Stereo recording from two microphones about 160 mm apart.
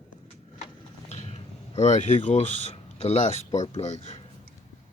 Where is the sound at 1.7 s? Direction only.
45° left (ahead or behind).